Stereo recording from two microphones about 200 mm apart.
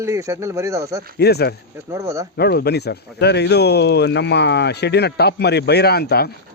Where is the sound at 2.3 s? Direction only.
50° left (ahead or behind).